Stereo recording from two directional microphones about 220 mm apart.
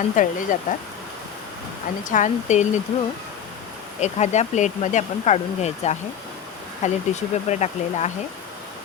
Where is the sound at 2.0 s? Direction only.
35° left (ahead or behind).